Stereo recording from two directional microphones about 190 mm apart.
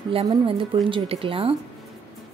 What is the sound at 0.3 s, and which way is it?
A woman's voice, 25° right (ahead or behind).